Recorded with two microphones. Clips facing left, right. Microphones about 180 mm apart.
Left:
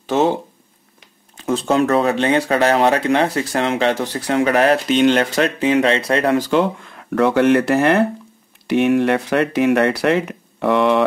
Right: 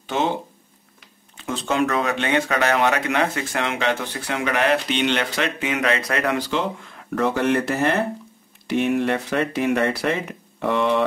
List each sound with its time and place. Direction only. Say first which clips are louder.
0.0 s speech: left 6 dB; 40° left (ahead or behind)
1.3 s speech: left 7 dB; 40° left (ahead or behind)
6.3 s speech: left 7 dB; 45° left (ahead or behind)
7.2 s speech: left 6 dB; 70° left (ahead or behind)